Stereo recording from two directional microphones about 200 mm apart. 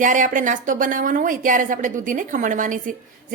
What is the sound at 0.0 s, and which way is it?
A woman's voice, 40° right (ahead or behind).